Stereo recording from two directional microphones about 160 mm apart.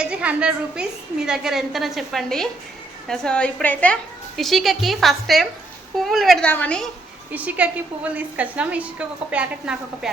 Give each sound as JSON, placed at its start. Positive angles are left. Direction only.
{"t": 0.0, "sound": "a woman's voice", "side_deg": -5}
{"t": 7.3, "sound": "a woman's voice", "side_deg": -10}